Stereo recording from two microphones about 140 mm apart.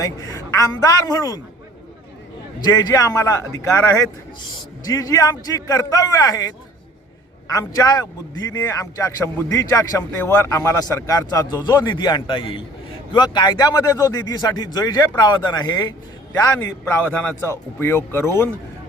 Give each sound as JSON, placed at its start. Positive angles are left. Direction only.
{"t": 0.0, "sound": "speech", "side_deg": 25}
{"t": 2.6, "sound": "speech", "side_deg": 30}
{"t": 16.3, "sound": "a man's voice", "side_deg": 15}